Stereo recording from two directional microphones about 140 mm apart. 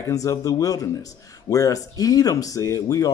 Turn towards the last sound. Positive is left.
turn(degrees=25)  # may be behind; listen again after turning